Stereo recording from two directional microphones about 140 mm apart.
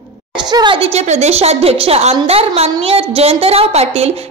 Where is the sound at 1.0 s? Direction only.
50° right (ahead or behind).